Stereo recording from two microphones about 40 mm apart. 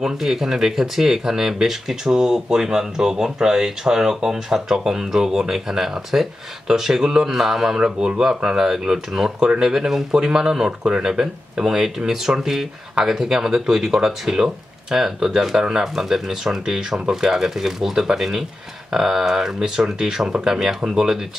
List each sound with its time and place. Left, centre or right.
0.0 s speech: centre